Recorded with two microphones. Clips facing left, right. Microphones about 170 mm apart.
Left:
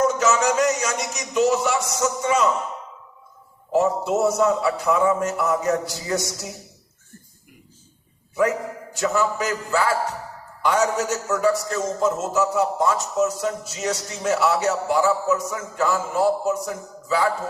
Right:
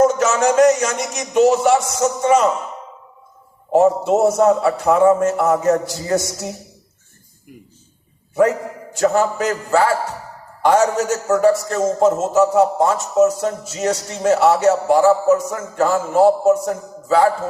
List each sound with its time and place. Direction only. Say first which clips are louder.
0.2 s a man's voice: right 6 dB; 55° right (ahead or behind)
3.7 s a man's voice: right 6 dB; 50° right (ahead or behind)
9.0 s a man's voice: right 6 dB; 50° right (ahead or behind)